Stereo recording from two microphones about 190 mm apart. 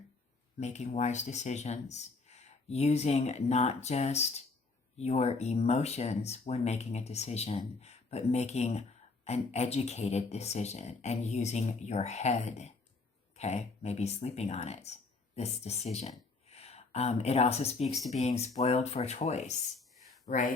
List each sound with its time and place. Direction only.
0.6 s speech: 35° left (ahead or behind)